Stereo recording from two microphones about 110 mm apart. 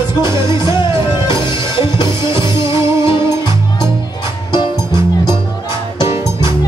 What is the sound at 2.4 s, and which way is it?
Music, 30° right (ahead or behind).